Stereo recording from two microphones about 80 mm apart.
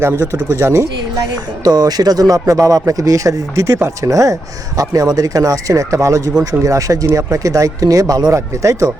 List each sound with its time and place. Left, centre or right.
0.0 s speech: right
1.6 s speech: right